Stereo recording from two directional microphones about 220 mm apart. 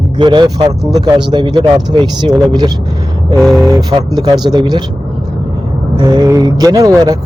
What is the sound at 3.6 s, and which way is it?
Speech, 15° right (ahead or behind).